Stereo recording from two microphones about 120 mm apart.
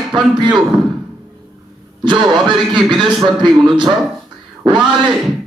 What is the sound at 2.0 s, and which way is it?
Speech, 40° right (ahead or behind).